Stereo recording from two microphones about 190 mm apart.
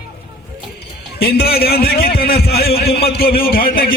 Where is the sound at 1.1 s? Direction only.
55° left (ahead or behind).